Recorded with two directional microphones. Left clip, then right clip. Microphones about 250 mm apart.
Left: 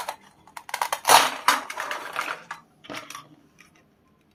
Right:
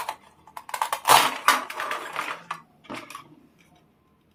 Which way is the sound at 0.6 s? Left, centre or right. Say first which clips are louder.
Even; centre.